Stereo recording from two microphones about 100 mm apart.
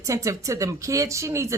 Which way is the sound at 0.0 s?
30° right (ahead or behind).